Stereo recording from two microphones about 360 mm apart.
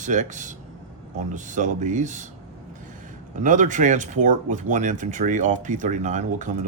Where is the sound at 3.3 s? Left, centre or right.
Right.